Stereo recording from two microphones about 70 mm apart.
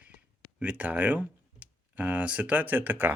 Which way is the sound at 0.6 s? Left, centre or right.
Right.